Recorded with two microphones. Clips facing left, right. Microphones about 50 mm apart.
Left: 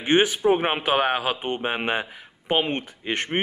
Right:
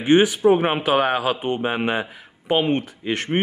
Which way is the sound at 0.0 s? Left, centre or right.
Left.